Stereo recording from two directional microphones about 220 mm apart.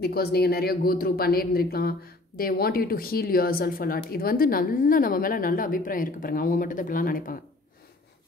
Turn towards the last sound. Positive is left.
turn(degrees=40)  # may be behind; listen again after turning